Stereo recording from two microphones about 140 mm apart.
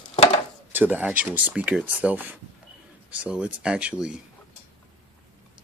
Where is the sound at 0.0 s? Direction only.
45° left (ahead or behind).